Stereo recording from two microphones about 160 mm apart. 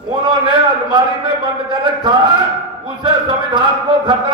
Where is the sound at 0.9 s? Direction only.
30° right (ahead or behind).